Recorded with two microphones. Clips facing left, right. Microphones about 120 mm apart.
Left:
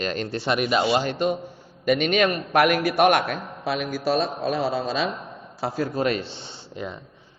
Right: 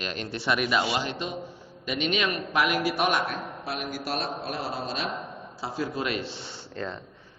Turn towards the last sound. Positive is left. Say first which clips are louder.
# left 1 dB
turn(degrees=15)  # may be behind; listen again after turning